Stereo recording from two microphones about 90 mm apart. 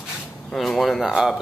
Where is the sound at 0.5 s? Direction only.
Centre (ahead or behind).